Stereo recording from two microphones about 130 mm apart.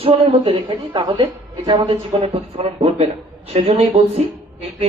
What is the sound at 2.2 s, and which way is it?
A woman's voice, 50° right (ahead or behind).